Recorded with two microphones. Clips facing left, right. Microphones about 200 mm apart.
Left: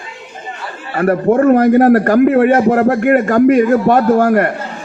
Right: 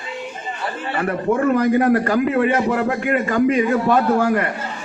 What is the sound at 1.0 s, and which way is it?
A man's voice, 50° left (ahead or behind).